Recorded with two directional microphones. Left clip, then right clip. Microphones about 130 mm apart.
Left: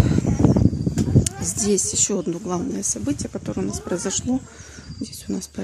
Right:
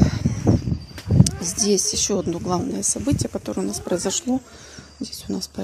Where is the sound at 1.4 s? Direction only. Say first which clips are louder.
Right 4 dB; 25° left (ahead or behind).